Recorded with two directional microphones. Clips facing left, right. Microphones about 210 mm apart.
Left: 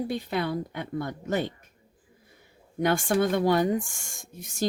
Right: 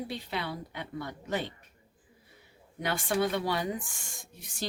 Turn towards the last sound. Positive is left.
turn(degrees=45)  # may be behind; listen again after turning